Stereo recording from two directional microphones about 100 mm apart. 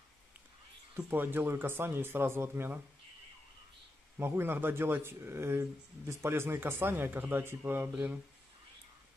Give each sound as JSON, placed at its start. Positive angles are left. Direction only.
{"t": 0.9, "sound": "speech", "side_deg": -20}
{"t": 4.2, "sound": "speech", "side_deg": -20}